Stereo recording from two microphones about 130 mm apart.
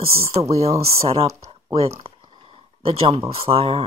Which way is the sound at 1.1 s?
50° right (ahead or behind).